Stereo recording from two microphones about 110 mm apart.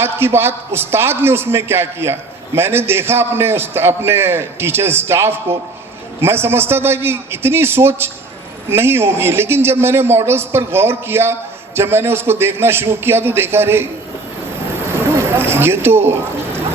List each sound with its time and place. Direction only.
0.0 s a man's voice: 20° right (ahead or behind)
15.1 s speech: 20° right (ahead or behind)